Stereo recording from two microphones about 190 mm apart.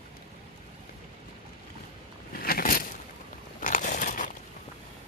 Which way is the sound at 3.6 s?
45° left (ahead or behind).